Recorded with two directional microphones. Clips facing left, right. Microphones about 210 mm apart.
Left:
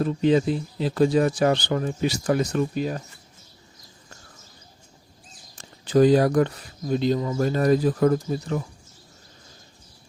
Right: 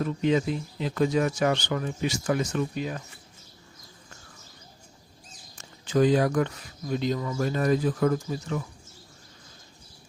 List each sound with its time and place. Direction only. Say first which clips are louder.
0.0 s speech: left 4 dB; 30° left (ahead or behind)
5.5 s speech: left 5 dB; 35° left (ahead or behind)